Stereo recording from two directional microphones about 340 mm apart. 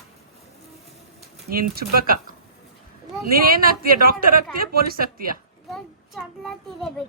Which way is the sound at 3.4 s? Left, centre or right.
Right.